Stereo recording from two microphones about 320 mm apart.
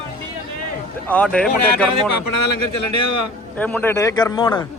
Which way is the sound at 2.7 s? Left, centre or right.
Left.